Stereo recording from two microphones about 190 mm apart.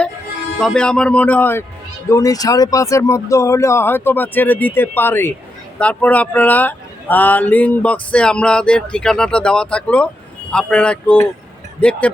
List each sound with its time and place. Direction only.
0.6 s speech: 5° left (ahead or behind)